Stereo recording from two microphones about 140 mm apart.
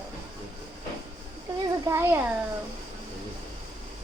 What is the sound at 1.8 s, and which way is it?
Speech, 20° right (ahead or behind).